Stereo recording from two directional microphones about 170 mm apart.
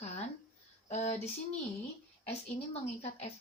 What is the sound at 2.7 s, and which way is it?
Speech, 35° left (ahead or behind).